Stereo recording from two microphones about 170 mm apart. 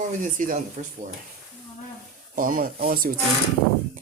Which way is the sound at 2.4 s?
55° right (ahead or behind).